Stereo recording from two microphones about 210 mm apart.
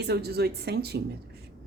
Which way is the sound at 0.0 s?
50° right (ahead or behind).